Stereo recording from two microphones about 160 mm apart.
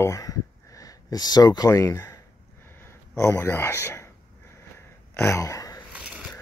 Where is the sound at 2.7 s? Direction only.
15° left (ahead or behind).